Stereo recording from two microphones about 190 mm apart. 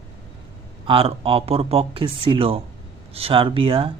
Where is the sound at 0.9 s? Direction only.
30° right (ahead or behind).